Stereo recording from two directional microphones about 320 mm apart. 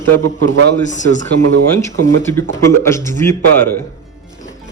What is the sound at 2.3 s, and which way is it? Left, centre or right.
Speech, centre.